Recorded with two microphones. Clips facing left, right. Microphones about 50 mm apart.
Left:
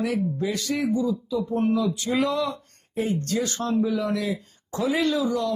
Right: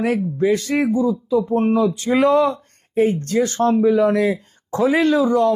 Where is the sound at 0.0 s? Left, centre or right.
Right.